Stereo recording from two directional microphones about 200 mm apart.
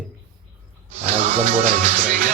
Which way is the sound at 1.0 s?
35° right (ahead or behind).